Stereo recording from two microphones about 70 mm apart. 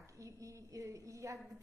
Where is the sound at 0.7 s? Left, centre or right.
Right.